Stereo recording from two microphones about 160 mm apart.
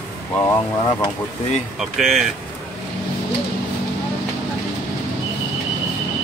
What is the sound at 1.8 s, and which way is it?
Speech, centre (ahead or behind).